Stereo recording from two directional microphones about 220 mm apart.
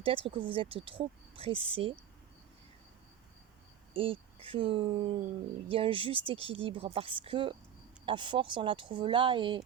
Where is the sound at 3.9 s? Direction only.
25° right (ahead or behind).